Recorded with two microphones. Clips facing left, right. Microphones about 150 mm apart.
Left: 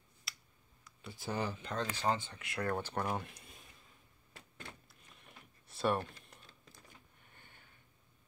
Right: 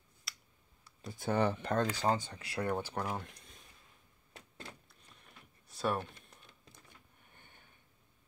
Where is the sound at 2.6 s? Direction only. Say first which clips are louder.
Right 1 dB; 15° right (ahead or behind).